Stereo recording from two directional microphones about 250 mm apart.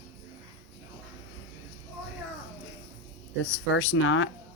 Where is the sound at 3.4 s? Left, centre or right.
Left.